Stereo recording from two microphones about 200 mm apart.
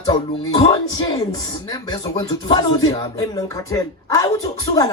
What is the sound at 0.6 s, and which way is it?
Speech, 20° left (ahead or behind).